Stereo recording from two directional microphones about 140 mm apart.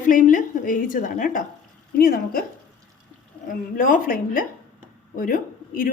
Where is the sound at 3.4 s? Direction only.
80° left.